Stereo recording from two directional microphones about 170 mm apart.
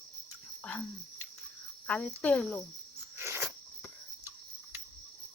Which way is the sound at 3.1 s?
15° right (ahead or behind).